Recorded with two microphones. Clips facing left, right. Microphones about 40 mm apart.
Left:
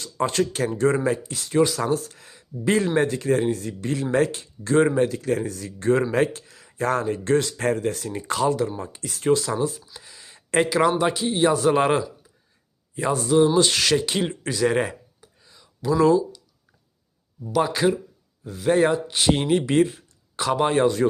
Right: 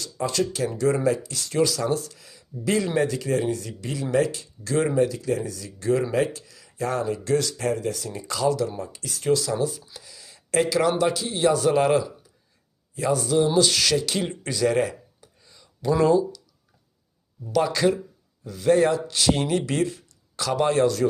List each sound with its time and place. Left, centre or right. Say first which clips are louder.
0.0 s speech: left 2 dB; left; by 14.8 s centre
15.2 s a sound: left 1 dB; centre
15.9 s speech: left 1 dB; centre
17.5 s speech: even; centre